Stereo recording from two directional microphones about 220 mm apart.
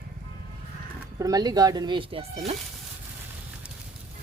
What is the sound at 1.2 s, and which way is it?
Speech, 15° right (ahead or behind).